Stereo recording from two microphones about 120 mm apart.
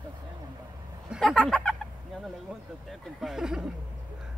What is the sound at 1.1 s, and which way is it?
Speech, centre (ahead or behind).